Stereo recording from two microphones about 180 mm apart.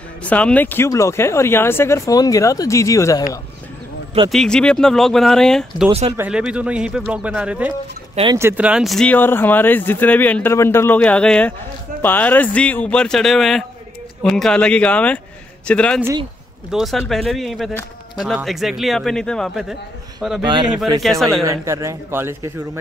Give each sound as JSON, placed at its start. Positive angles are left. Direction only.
{"t": 0.2, "sound": "speech", "side_deg": 5}
{"t": 4.3, "sound": "a man's voice", "side_deg": 5}
{"t": 5.9, "sound": "speech", "side_deg": -35}
{"t": 6.1, "sound": "a man's voice", "side_deg": -5}
{"t": 20.4, "sound": "speech", "side_deg": -25}
{"t": 21.0, "sound": "a man's voice", "side_deg": 0}
{"t": 21.5, "sound": "speech", "side_deg": -15}